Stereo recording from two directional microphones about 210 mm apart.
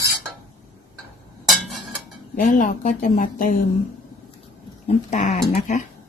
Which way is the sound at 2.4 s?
40° left (ahead or behind).